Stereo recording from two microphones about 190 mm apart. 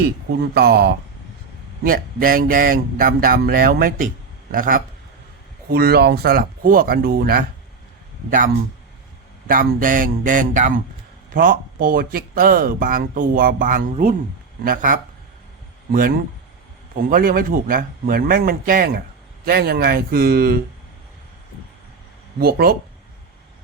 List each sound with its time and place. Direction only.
0.5 s speech: 55° right (ahead or behind)
9.5 s speech: 45° right (ahead or behind)
22.4 s speech: 55° right (ahead or behind)